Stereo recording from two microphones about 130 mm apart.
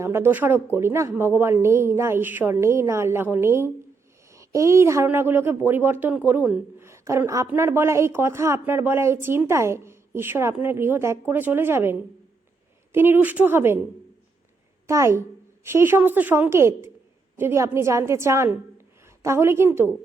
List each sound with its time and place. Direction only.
0.0 s a woman's voice: 20° right (ahead or behind)
14.8 s a woman's voice: 20° right (ahead or behind)